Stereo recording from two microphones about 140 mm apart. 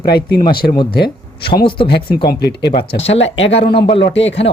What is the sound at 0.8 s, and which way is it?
Speech, 35° left (ahead or behind).